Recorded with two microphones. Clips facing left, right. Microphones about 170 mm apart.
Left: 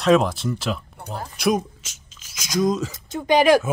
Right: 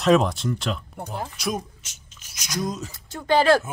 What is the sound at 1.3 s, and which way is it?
Speech, 75° left (ahead or behind).